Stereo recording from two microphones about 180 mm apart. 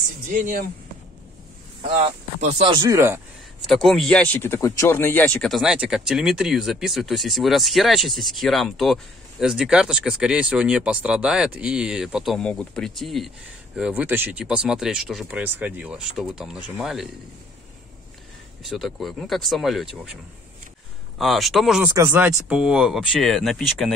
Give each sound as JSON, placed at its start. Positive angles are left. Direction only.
{"t": 2.0, "sound": "speech", "side_deg": -40}
{"t": 2.7, "sound": "speech", "side_deg": -20}
{"t": 3.6, "sound": "speech", "side_deg": 0}
{"t": 18.6, "sound": "speech", "side_deg": 0}
{"t": 21.2, "sound": "speech", "side_deg": 0}
{"t": 21.9, "sound": "speech", "side_deg": -10}